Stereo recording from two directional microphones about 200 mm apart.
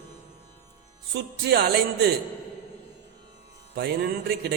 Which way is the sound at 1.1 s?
55° right (ahead or behind).